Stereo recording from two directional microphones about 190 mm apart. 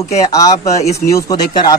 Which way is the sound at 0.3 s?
20° left (ahead or behind).